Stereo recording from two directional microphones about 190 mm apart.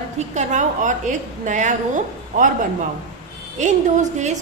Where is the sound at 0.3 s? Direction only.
40° right (ahead or behind).